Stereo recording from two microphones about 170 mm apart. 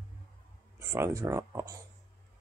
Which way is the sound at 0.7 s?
15° right (ahead or behind).